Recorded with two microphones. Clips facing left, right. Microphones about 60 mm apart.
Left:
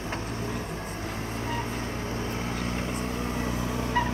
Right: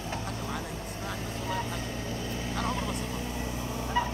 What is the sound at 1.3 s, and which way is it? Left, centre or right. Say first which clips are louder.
Vehicle: left 2 dB; left.